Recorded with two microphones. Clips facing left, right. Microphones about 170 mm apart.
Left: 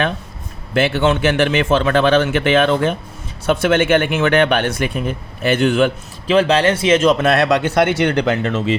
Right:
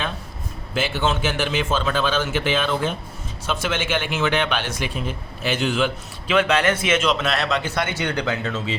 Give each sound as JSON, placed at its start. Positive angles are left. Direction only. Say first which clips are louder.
{"t": 0.7, "sound": "speech", "louder": "left 7 dB", "side_deg": 65}
{"t": 6.2, "sound": "speech", "louder": "left 5 dB", "side_deg": 35}
{"t": 7.0, "sound": "speech", "louder": "left 8 dB", "side_deg": 50}